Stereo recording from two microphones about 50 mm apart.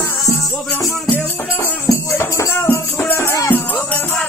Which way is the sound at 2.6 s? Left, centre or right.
Left.